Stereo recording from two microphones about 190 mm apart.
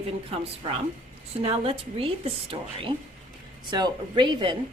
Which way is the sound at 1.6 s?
30° right (ahead or behind).